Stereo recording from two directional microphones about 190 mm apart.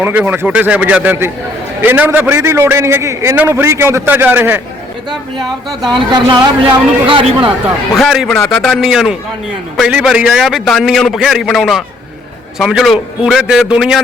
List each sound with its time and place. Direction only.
0.0 s a man's voice: 10° right (ahead or behind)
5.4 s speech: 25° right (ahead or behind)
7.9 s a man's voice: centre (ahead or behind)